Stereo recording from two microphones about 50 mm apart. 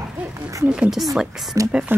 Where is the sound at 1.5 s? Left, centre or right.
Right.